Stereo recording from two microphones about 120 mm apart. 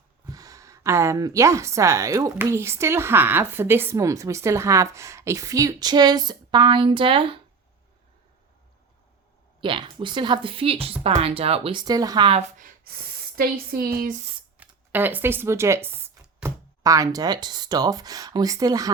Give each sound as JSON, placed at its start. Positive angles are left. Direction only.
{"t": 0.3, "sound": "a woman's voice", "side_deg": -30}
{"t": 9.6, "sound": "speech", "side_deg": -45}
{"t": 11.8, "sound": "speech", "side_deg": -30}
{"t": 12.2, "sound": "speech", "side_deg": -55}
{"t": 14.1, "sound": "speech", "side_deg": -80}
{"t": 14.6, "sound": "a sound", "side_deg": -15}
{"t": 14.9, "sound": "a woman's voice", "side_deg": -15}